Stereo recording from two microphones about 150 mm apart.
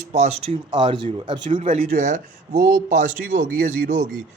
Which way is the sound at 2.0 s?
55° right (ahead or behind).